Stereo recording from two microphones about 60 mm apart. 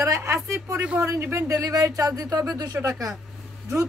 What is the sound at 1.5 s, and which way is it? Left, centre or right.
Speech, right.